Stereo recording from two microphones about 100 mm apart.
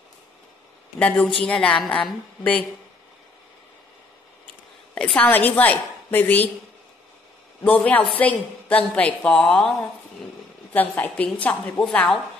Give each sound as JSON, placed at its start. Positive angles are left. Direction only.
{"t": 0.9, "sound": "a woman's voice", "side_deg": 15}
{"t": 4.9, "sound": "a woman's voice", "side_deg": 10}
{"t": 7.6, "sound": "a woman's voice", "side_deg": 15}